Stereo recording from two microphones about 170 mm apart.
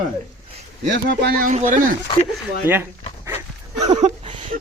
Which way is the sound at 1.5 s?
50° right (ahead or behind).